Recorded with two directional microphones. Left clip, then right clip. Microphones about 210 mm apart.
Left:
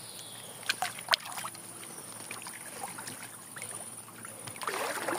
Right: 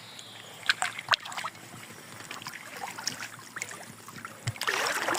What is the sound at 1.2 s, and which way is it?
Boat, centre (ahead or behind).